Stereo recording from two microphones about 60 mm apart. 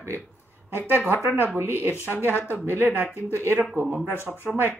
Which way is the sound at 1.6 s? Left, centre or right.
Right.